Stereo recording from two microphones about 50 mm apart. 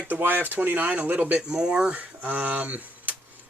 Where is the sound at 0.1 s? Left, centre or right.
Right.